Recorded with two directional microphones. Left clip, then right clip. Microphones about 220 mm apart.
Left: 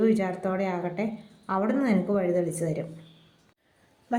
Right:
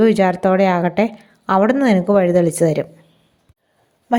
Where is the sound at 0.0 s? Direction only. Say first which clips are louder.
Right 12 dB; 40° right (ahead or behind).